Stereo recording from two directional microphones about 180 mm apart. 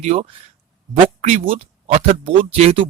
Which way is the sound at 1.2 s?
40° right (ahead or behind).